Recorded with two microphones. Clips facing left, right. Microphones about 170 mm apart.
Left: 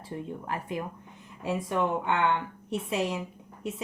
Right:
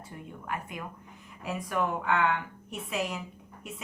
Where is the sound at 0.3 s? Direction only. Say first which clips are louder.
Even; 30° left (ahead or behind).